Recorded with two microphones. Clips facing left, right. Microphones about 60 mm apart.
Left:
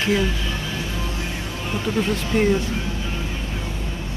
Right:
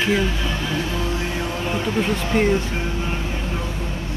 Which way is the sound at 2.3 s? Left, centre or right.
Right.